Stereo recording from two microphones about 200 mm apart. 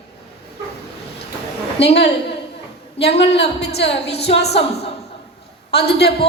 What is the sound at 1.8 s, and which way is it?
Speech, 55° left (ahead or behind).